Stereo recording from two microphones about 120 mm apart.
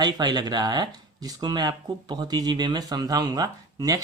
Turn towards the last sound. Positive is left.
turn(degrees=-30)  # may be behind; listen again after turning